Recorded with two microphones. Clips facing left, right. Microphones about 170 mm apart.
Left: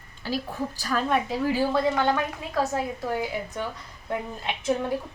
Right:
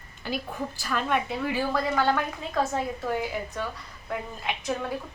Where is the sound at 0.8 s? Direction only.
35° left (ahead or behind).